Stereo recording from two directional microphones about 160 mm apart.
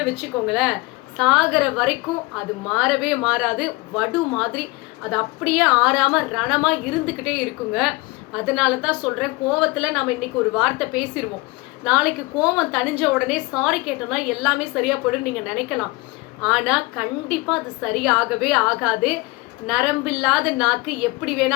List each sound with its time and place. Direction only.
0.0 s a woman's voice: 5° right (ahead or behind)